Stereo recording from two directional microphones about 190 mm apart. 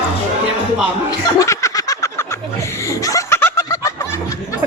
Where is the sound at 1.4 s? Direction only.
15° left (ahead or behind).